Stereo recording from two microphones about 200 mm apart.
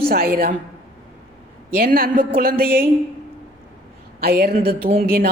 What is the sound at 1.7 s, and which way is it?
Speech, 50° right (ahead or behind).